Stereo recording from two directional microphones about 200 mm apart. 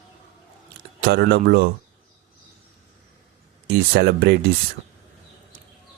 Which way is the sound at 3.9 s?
50° right (ahead or behind).